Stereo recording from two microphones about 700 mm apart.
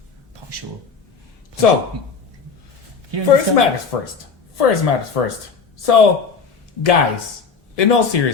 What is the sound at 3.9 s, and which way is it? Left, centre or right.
Speech, left.